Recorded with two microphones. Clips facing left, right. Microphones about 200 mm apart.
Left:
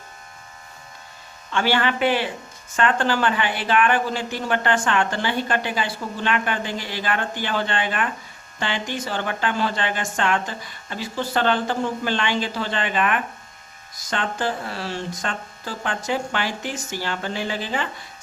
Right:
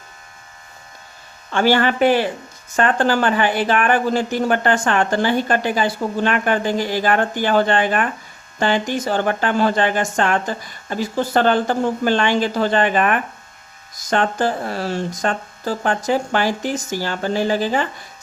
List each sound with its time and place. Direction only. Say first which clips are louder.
1.5 s speech: right 5 dB; 45° right (ahead or behind)